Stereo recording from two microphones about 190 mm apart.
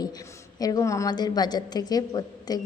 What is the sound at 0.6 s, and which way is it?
A woman's voice, 20° left (ahead or behind).